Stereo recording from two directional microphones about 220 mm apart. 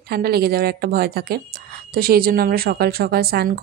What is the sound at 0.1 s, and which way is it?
Speech, 45° right (ahead or behind).